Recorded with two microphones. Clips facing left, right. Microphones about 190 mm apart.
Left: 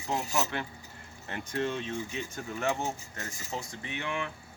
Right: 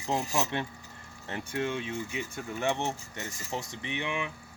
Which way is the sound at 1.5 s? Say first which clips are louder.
Even; 10° right (ahead or behind).